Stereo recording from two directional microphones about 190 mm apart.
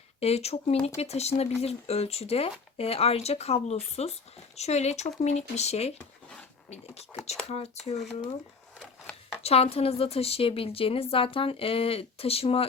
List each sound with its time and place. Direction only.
0.2 s speech: 35° left (ahead or behind)
9.4 s a woman's voice: 30° left (ahead or behind)